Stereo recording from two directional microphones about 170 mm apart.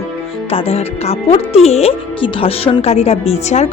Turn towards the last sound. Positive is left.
turn(degrees=40)  # may be behind; listen again after turning